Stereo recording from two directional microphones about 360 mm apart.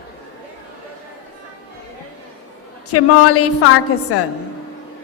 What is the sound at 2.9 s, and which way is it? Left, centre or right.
A woman's voice, left.